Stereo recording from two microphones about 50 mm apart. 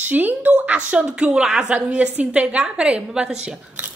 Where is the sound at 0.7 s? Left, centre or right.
Right.